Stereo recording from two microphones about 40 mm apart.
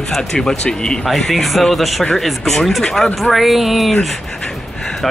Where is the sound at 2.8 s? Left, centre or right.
Centre.